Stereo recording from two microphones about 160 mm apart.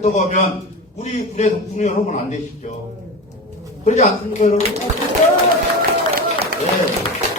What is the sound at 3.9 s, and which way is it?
Speech, 45° left (ahead or behind).